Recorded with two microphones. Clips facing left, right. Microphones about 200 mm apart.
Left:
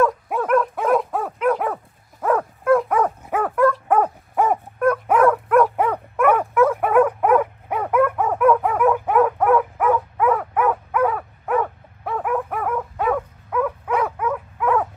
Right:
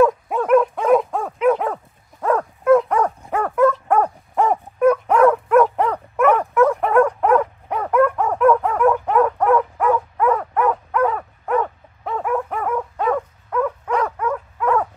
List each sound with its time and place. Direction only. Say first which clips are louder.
0.0 s dog: right 3 dB; centre (ahead or behind)